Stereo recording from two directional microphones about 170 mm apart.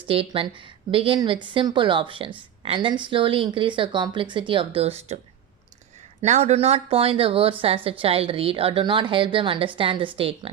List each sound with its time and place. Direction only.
0.1 s a woman's voice: 30° right (ahead or behind)
6.2 s a woman's voice: 40° right (ahead or behind)